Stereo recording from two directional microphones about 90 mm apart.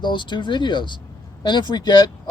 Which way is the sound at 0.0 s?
60° left (ahead or behind).